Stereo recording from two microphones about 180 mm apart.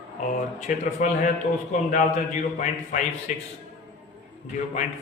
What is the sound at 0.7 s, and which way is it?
Speech, 45° left (ahead or behind).